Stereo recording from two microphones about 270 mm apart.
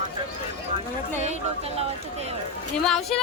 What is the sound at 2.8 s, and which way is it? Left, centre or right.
Speech, centre.